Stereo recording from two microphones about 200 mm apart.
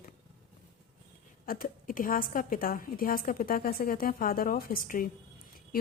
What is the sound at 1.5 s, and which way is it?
Speech, 45° left (ahead or behind).